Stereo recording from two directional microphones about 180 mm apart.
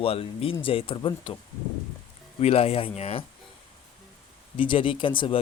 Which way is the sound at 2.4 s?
35° left (ahead or behind).